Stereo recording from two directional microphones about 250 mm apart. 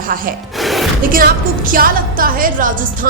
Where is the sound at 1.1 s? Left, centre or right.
Right.